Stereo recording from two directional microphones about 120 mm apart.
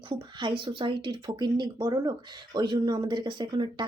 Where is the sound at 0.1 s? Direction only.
40° right (ahead or behind).